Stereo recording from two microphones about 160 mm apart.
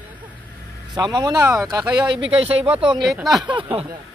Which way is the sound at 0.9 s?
25° right (ahead or behind).